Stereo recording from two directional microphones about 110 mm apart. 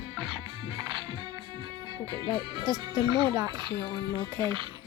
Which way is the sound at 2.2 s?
35° right (ahead or behind).